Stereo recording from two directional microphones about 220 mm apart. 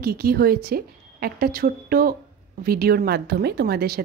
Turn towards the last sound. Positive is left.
turn(degrees=-45)  # may be behind; listen again after turning